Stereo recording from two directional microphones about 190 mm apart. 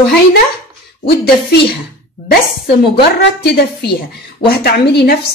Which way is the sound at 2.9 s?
60° left (ahead or behind).